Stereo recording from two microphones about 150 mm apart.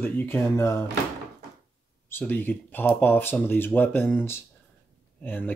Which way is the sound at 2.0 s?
15° left (ahead or behind).